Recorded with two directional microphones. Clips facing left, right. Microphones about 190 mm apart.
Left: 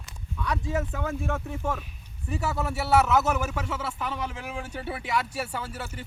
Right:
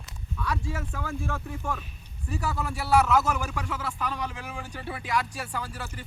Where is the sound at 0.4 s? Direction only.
20° left (ahead or behind).